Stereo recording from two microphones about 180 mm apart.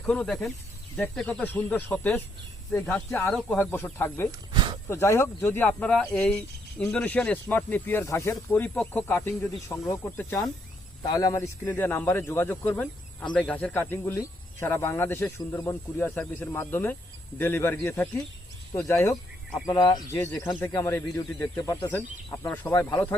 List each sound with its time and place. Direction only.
0.0 s a man's voice: 5° left (ahead or behind)
4.3 s a sound: 25° right (ahead or behind)
4.9 s a man's voice: 15° left (ahead or behind)